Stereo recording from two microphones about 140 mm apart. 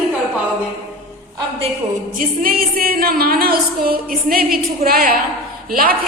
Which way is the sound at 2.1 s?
90° right.